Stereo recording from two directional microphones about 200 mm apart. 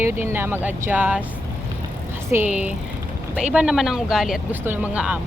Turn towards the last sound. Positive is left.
turn(degrees=-5)  # may be behind; listen again after turning